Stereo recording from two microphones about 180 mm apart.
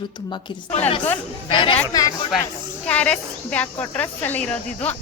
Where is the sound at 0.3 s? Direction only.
25° left (ahead or behind).